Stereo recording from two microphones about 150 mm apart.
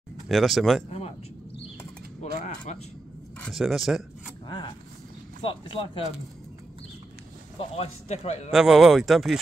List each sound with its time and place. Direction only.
0.3 s speech: centre (ahead or behind)
0.8 s a man's voice: 40° left (ahead or behind)
2.3 s speech: 50° left (ahead or behind)
3.3 s speech: 5° left (ahead or behind)
4.5 s speech: 30° left (ahead or behind)
7.5 s a man's voice: 40° left (ahead or behind)
8.5 s speech: 5° right (ahead or behind)